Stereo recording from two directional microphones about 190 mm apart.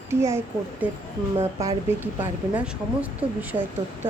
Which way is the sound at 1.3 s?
25° right (ahead or behind).